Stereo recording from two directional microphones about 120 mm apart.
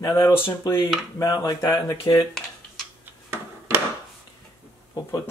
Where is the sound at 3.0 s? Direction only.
20° right (ahead or behind).